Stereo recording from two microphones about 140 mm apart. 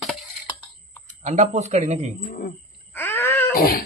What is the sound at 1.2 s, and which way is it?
Speech, 55° right (ahead or behind).